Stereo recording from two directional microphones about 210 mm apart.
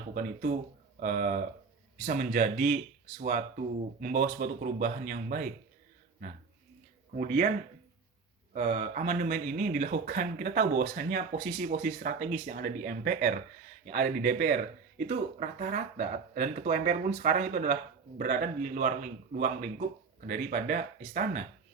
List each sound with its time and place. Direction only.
0.1 s speech: 40° right (ahead or behind)
8.5 s speech: 40° right (ahead or behind)